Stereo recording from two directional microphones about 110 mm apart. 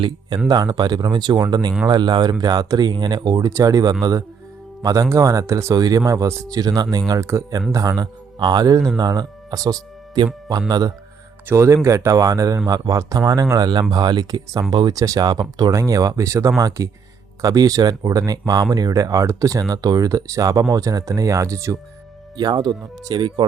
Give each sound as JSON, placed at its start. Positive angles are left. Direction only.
{"t": 0.4, "sound": "speech", "side_deg": -35}
{"t": 8.4, "sound": "speech", "side_deg": -40}
{"t": 11.4, "sound": "speech", "side_deg": -25}